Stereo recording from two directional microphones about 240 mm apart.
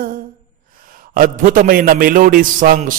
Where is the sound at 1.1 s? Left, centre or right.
Right.